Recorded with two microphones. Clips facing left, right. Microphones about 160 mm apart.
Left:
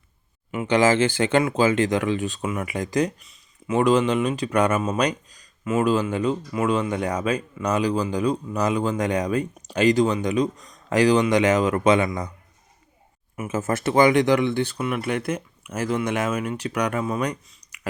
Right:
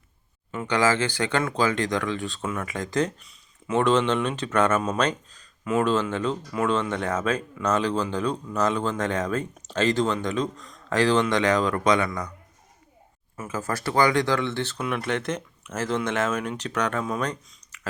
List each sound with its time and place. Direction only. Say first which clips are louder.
0.5 s speech: left 4 dB; 20° left (ahead or behind)
13.3 s speech: left 5 dB; 20° left (ahead or behind)